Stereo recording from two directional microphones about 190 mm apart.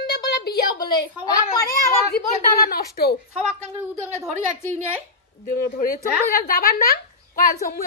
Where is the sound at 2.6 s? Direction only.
55° left (ahead or behind).